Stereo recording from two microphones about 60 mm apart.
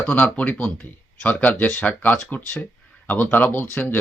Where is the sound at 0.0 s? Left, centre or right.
Left.